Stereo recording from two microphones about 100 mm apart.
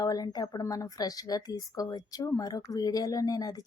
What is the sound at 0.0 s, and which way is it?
A woman's voice, 40° left (ahead or behind).